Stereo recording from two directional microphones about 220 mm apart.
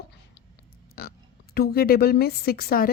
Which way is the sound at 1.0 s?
45° left (ahead or behind).